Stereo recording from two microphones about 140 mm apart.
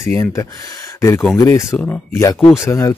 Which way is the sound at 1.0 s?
20° left (ahead or behind).